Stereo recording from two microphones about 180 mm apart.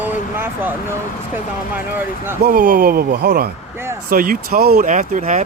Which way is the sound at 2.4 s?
50° right (ahead or behind).